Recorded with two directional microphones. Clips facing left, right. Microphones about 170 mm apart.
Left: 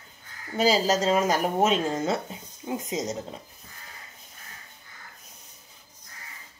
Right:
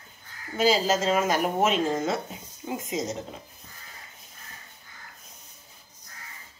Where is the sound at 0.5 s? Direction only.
35° left (ahead or behind).